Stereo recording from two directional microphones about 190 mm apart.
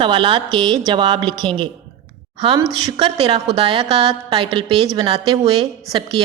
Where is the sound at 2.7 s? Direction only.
25° right (ahead or behind).